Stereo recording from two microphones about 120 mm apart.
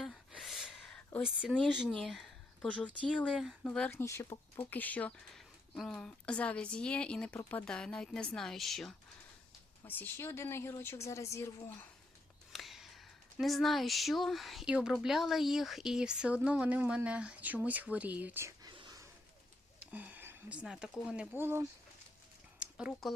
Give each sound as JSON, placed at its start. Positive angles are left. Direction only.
{"t": 0.0, "sound": "a sound", "side_deg": 0}
{"t": 1.2, "sound": "a woman's voice", "side_deg": -5}
{"t": 3.9, "sound": "speech", "side_deg": 25}
{"t": 5.3, "sound": "a woman's voice", "side_deg": 5}
{"t": 9.8, "sound": "speech", "side_deg": 15}
{"t": 12.5, "sound": "speech", "side_deg": 0}
{"t": 18.7, "sound": "a sound", "side_deg": -45}
{"t": 19.9, "sound": "speech", "side_deg": -15}
{"t": 21.3, "sound": "speech", "side_deg": -20}
{"t": 22.5, "sound": "a sound", "side_deg": -10}
{"t": 22.9, "sound": "a woman's voice", "side_deg": 0}